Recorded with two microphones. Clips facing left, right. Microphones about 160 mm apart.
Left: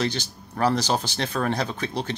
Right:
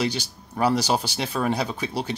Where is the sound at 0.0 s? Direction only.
10° right (ahead or behind).